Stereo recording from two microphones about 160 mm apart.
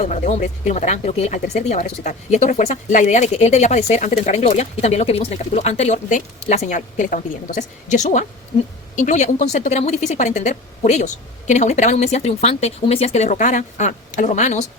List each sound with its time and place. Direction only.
0.0 s speech: 45° left (ahead or behind)